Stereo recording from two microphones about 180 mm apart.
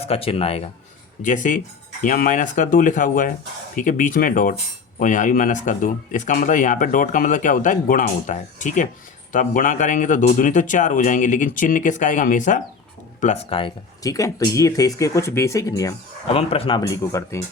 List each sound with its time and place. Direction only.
0.0 s speech: 35° left (ahead or behind)
1.2 s speech: 45° left (ahead or behind)
13.2 s speech: 35° left (ahead or behind)
14.0 s speech: 20° left (ahead or behind)
16.3 s speech: 30° left (ahead or behind); by 17.4 s 15° left (ahead or behind)